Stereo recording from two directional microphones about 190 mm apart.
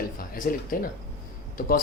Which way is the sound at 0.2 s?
45° left (ahead or behind).